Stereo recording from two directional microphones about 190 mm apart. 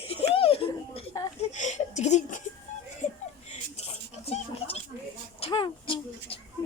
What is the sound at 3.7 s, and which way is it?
Music, 35° left (ahead or behind).